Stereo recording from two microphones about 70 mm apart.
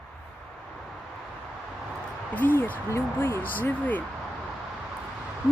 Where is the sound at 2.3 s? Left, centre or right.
Left.